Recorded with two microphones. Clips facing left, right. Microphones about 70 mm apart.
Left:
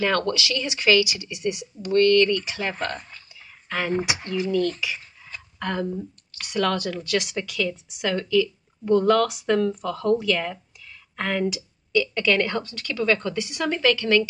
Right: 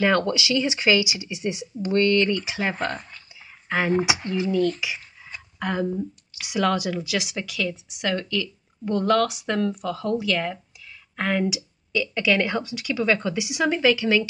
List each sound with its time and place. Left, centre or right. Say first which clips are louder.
0.0 s speech: right 2 dB; centre